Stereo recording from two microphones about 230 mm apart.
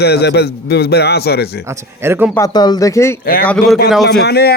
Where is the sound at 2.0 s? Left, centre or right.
Centre.